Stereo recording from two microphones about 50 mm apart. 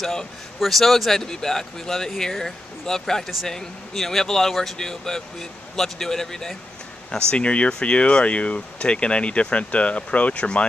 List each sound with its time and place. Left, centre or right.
0.0 s a man's voice: centre
7.1 s speech: centre